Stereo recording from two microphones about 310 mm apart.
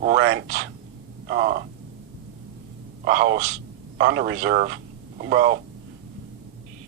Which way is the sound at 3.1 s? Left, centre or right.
Right.